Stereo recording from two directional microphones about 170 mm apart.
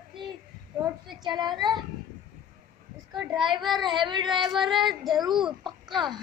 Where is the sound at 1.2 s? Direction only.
25° right (ahead or behind).